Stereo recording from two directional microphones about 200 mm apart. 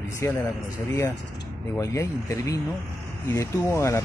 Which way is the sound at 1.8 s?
15° left (ahead or behind).